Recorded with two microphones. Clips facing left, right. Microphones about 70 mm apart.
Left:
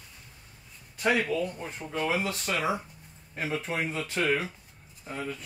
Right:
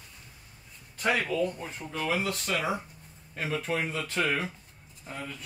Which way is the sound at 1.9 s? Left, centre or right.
Centre.